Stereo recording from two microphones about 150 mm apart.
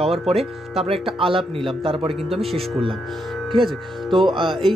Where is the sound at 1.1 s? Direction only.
35° right (ahead or behind).